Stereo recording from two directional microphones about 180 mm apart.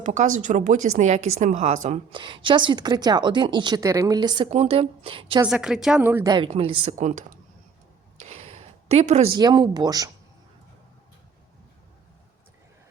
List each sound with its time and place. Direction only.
0.0 s a woman's voice: 40° right (ahead or behind)
2.1 s a woman's voice: 25° right (ahead or behind)
4.5 s speech: 35° right (ahead or behind)
5.5 s a woman's voice: 5° right (ahead or behind); by 6.9 s 30° right (ahead or behind)
7.0 s a woman's voice: 45° right (ahead or behind)
8.3 s a sound: 35° right (ahead or behind)
9.3 s a woman's voice: 25° right (ahead or behind)